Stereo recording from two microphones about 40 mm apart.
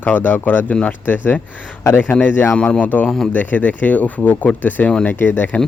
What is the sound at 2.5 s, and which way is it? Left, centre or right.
Speech, left.